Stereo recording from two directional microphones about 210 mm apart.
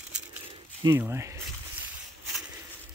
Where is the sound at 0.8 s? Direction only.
10° right (ahead or behind).